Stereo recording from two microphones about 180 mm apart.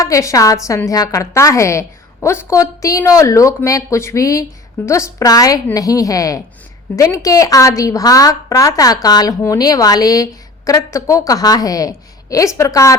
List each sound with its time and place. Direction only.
0.0 s a woman's voice: 15° left (ahead or behind)